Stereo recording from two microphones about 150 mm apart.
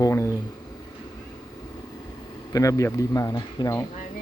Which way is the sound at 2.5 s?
20° left (ahead or behind).